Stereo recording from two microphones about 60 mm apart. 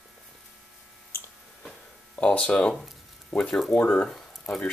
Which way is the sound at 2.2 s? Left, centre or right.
Centre.